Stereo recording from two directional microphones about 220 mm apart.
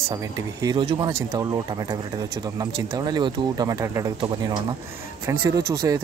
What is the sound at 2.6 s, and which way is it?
Speech, 20° right (ahead or behind).